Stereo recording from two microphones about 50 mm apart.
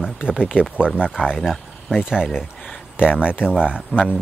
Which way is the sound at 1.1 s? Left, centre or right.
Centre.